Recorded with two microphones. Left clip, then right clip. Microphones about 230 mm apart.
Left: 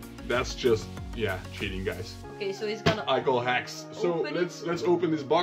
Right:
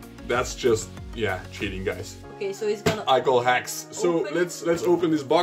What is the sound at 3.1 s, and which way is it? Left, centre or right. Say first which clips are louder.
Speech: right 9 dB; right.